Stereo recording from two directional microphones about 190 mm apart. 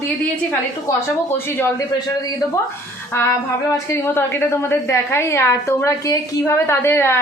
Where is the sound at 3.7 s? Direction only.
15° left (ahead or behind).